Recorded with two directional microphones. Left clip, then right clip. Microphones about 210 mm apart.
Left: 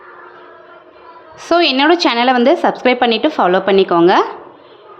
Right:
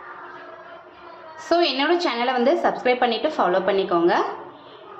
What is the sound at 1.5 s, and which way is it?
A woman's voice, 40° left (ahead or behind).